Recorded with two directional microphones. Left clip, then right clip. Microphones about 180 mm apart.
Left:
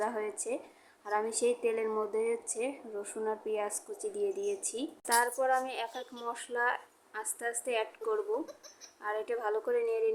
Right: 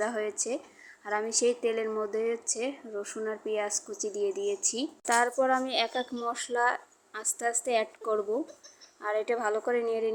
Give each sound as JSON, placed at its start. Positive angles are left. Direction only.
{"t": 0.0, "sound": "a woman's voice", "side_deg": -15}